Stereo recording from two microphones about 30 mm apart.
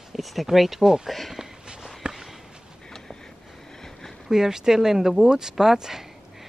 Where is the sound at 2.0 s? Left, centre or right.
Right.